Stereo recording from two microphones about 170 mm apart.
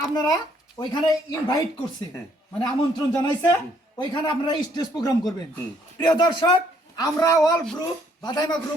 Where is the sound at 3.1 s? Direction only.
15° left (ahead or behind).